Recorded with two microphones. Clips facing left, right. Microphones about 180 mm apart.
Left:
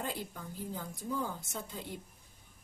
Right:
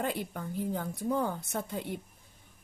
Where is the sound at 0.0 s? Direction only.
65° right (ahead or behind).